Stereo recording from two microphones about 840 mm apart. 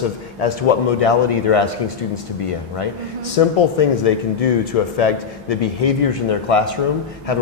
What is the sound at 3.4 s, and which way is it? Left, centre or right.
Speech, left.